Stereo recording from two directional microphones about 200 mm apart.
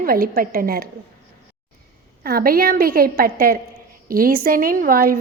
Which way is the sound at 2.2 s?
45° right (ahead or behind).